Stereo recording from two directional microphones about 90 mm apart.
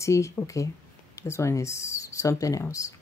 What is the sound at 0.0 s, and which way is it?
Speech, 35° left (ahead or behind).